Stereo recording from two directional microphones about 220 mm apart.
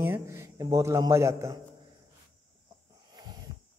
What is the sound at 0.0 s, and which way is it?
Speech, 10° right (ahead or behind).